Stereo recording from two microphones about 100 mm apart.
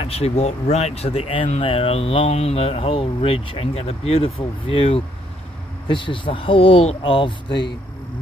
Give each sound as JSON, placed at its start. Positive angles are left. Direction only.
{"t": 0.0, "sound": "speech", "side_deg": 90}
{"t": 5.9, "sound": "speech", "side_deg": 55}